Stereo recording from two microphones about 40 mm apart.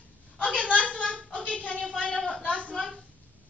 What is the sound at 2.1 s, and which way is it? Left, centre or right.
Speech, centre.